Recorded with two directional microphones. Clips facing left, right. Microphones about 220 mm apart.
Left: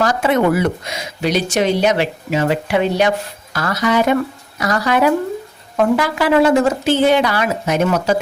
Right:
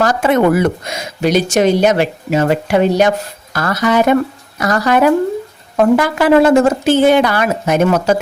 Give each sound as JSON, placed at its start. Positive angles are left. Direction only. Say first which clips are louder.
{"t": 0.0, "sound": "speech", "louder": "right 3 dB", "side_deg": -50}